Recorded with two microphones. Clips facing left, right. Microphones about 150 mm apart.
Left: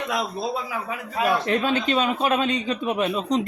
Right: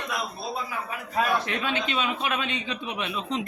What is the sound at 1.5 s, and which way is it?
A man's voice, 40° left (ahead or behind).